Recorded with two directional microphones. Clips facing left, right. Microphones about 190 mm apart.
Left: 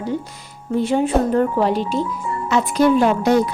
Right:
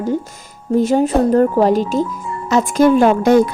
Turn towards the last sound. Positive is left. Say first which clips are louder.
# right 4 dB
turn(degrees=-50)  # may be behind; listen again after turning